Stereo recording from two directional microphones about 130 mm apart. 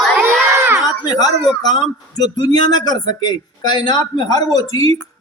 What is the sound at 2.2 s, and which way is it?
Speech, 30° left (ahead or behind).